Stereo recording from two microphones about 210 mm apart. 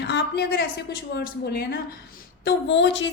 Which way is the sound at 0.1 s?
50° left (ahead or behind).